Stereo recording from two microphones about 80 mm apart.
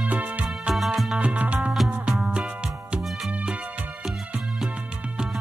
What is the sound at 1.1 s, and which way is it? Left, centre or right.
Music, centre.